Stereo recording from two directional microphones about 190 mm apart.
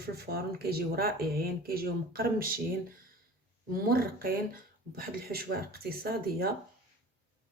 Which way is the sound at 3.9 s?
50° right (ahead or behind).